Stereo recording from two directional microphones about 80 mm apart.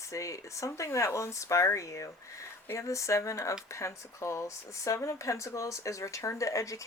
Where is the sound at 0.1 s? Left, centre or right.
Left.